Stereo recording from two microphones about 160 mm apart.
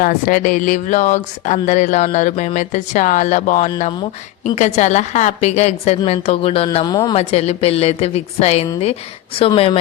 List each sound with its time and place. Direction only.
0.0 s a woman's voice: 55° left (ahead or behind); by 6.7 s 40° left (ahead or behind)
6.8 s speech: 25° left (ahead or behind)
7.2 s a woman's voice: 40° left (ahead or behind)